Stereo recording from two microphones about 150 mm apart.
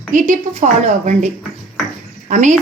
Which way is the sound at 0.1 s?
60° right (ahead or behind).